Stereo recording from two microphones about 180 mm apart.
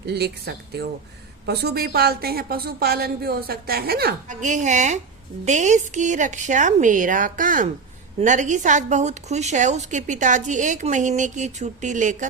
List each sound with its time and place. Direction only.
0.0 s speech: 65° right (ahead or behind)
4.3 s a woman's voice: 45° right (ahead or behind)